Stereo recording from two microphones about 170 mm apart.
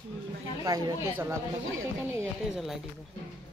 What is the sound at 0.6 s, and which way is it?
A woman's voice, 25° right (ahead or behind).